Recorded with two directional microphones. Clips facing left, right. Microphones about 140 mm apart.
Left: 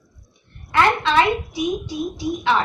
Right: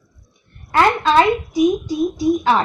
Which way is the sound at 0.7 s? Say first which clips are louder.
Right 3 dB; 40° right (ahead or behind).